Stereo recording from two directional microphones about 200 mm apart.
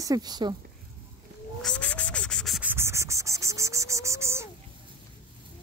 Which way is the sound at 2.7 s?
15° right (ahead or behind).